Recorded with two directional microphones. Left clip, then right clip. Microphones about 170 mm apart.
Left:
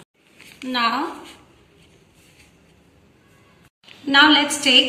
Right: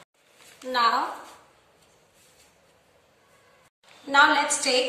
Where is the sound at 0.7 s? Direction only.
15° right (ahead or behind).